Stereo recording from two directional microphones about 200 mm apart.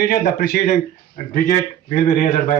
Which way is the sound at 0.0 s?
50° left (ahead or behind).